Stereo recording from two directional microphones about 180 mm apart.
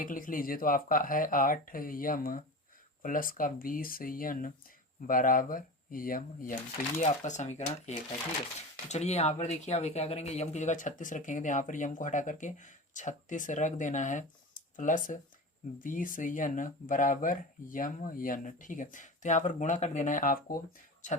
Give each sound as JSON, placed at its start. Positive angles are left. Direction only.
{"t": 0.0, "sound": "speech", "side_deg": 50}